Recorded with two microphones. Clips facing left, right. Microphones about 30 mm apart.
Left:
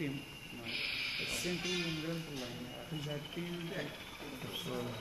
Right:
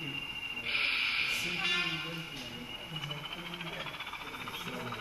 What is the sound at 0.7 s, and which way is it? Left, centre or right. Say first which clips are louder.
Speech: right 7 dB; right.